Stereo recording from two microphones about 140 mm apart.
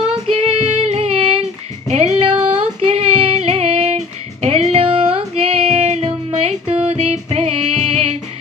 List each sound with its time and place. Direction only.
0.3 s female singing: 45° right (ahead or behind)